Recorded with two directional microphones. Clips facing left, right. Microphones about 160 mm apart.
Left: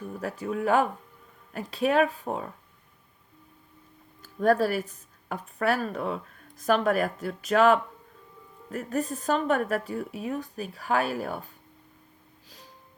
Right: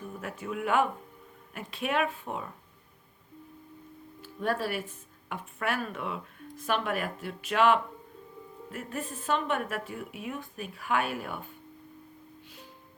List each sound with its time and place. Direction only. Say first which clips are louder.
0.1 s speech: left 6 dB; 35° left (ahead or behind)
4.2 s speech: left 8 dB; 40° left (ahead or behind)